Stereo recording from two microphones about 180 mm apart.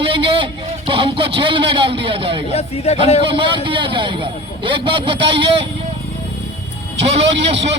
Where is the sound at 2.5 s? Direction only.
35° left (ahead or behind).